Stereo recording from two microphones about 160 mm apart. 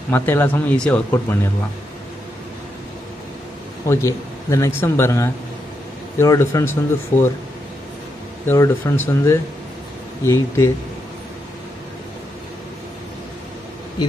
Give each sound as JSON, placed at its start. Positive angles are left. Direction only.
{"t": 0.1, "sound": "speech", "side_deg": 10}
{"t": 3.9, "sound": "speech", "side_deg": 15}
{"t": 8.5, "sound": "speech", "side_deg": 15}